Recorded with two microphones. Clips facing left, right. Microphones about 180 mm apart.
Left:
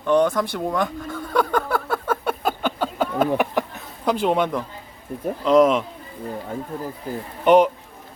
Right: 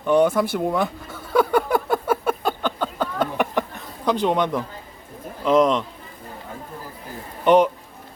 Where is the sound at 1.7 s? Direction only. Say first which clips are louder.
Right 3 dB; 15° right (ahead or behind).